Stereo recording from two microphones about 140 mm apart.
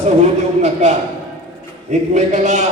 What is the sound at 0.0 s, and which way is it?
A man's voice, 55° right (ahead or behind).